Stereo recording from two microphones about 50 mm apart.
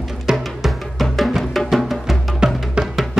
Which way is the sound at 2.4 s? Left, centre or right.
Centre.